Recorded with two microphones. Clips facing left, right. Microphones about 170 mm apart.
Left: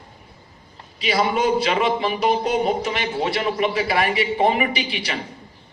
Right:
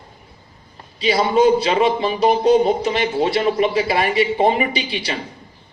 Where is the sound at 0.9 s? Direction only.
30° right (ahead or behind).